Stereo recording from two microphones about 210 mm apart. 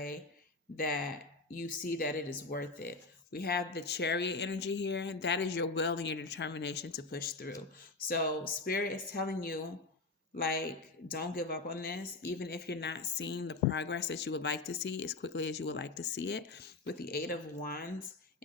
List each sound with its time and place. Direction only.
0.8 s a woman's voice: 45° left (ahead or behind)